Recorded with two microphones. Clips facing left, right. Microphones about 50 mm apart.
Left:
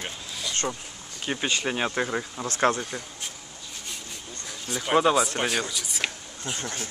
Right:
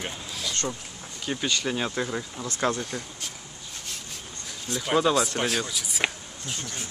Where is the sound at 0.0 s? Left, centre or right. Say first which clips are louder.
Right 1 dB; centre.